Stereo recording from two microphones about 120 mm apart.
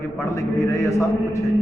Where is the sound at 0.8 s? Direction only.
25° left (ahead or behind).